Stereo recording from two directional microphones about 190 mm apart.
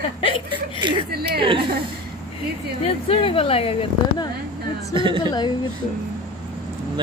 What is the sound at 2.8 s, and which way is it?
Speech, 30° left (ahead or behind).